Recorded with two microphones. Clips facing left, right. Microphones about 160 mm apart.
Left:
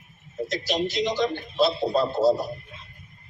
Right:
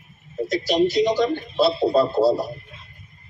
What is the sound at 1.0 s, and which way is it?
Speech, 45° right (ahead or behind).